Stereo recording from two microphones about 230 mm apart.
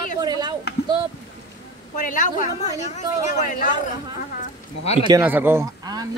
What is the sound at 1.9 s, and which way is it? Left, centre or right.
Speech, left.